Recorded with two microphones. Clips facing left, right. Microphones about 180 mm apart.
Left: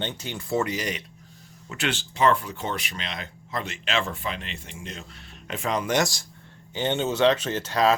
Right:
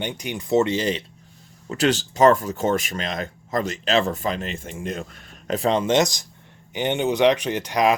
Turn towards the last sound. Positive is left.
turn(degrees=-15)  # may be behind; listen again after turning